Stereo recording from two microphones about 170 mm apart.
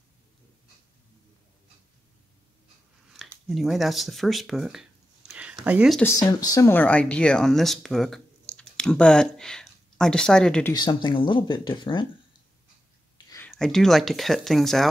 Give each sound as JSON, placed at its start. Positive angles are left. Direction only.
{"t": 3.4, "sound": "speech", "side_deg": 0}
{"t": 5.9, "sound": "speech", "side_deg": 15}
{"t": 10.7, "sound": "speech", "side_deg": 25}
{"t": 13.5, "sound": "speech", "side_deg": 5}